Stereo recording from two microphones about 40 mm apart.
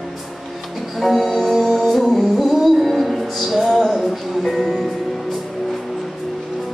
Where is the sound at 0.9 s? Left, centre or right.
Centre.